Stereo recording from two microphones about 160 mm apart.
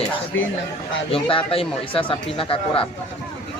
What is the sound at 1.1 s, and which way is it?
A man's voice, 35° left (ahead or behind).